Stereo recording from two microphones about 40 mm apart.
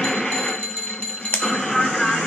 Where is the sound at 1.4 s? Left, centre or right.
Centre.